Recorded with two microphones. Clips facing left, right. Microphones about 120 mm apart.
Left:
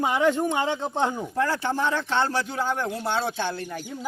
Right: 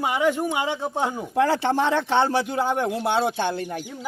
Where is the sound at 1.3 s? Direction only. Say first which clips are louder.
Right 7 dB; 75° right (ahead or behind).